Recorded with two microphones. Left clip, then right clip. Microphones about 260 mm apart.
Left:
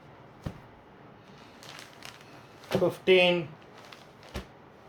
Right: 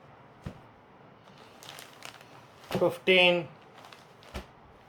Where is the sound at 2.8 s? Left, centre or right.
Centre.